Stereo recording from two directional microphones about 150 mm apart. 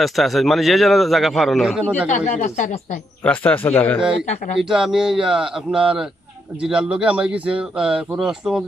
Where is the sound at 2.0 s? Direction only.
55° left (ahead or behind).